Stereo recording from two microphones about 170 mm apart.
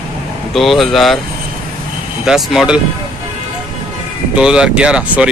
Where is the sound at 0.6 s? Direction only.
Centre (ahead or behind).